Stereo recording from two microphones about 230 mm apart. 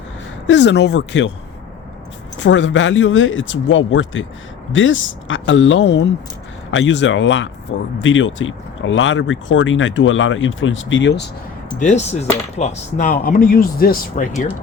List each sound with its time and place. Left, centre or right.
0.4 s speech: left
2.4 s speech: left
11.8 s speech: left